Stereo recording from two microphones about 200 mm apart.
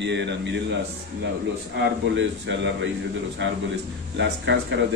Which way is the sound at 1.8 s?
60° right (ahead or behind).